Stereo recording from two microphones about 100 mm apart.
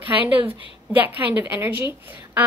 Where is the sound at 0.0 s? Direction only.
15° right (ahead or behind).